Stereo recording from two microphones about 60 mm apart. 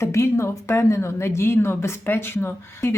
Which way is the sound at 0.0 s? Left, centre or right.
Left.